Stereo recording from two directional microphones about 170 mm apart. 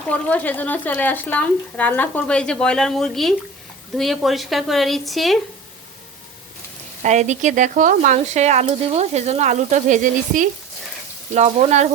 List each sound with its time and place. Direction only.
0.1 s a woman's voice: 10° left (ahead or behind)
7.0 s speech: 45° right (ahead or behind)